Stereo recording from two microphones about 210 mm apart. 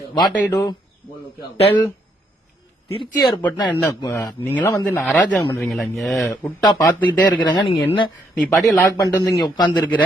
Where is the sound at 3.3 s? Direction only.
10° left (ahead or behind).